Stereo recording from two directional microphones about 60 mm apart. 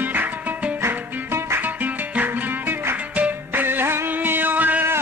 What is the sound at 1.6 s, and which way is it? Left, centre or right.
Music, right.